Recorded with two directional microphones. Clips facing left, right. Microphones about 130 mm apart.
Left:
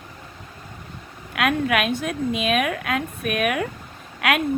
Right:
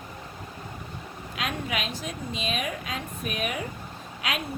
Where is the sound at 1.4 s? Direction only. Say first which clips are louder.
Left 10 dB; 65° left (ahead or behind).